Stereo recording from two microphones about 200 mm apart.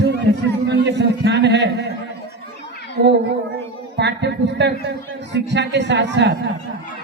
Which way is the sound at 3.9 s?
60° right (ahead or behind).